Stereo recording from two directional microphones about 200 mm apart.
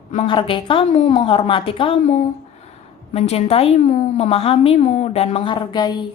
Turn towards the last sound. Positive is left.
turn(degrees=20)  # may be behind; listen again after turning